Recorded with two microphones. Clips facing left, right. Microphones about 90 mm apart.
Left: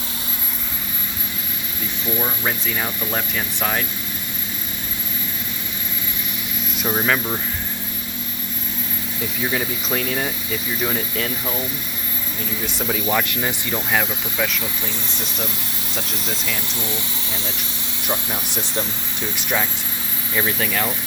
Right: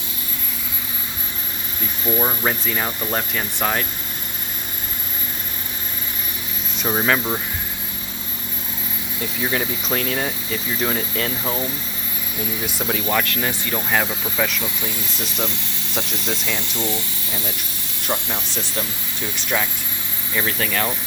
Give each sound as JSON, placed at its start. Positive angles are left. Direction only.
{"t": 2.1, "sound": "speech", "side_deg": -10}
{"t": 6.8, "sound": "speech", "side_deg": -5}
{"t": 9.4, "sound": "speech", "side_deg": 0}
{"t": 12.6, "sound": "speech", "side_deg": -5}
{"t": 13.2, "sound": "speech", "side_deg": 20}
{"t": 13.7, "sound": "speech", "side_deg": -5}
{"t": 18.3, "sound": "speech", "side_deg": 15}